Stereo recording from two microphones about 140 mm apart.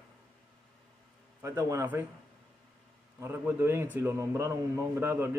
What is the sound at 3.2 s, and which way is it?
A man's voice, 15° right (ahead or behind).